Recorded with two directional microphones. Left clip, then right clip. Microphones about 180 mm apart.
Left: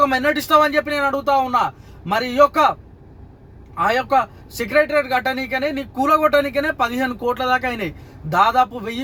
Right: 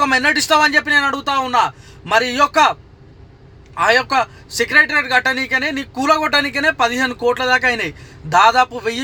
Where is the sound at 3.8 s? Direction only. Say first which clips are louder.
Right 3 dB; 10° right (ahead or behind).